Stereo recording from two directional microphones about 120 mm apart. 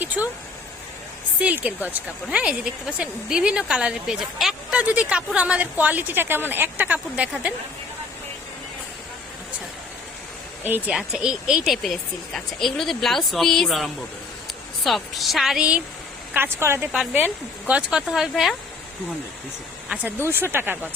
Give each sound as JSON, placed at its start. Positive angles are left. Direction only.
{"t": 0.0, "sound": "speech", "side_deg": -15}
{"t": 1.4, "sound": "speech", "side_deg": -10}
{"t": 10.6, "sound": "speech", "side_deg": -15}
{"t": 10.9, "sound": "speech", "side_deg": -5}
{"t": 16.3, "sound": "a woman's voice", "side_deg": -20}
{"t": 17.7, "sound": "speech", "side_deg": -10}
{"t": 19.9, "sound": "speech", "side_deg": -15}